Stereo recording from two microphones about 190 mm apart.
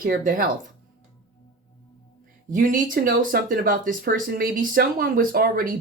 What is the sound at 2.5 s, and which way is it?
Speech, 45° right (ahead or behind).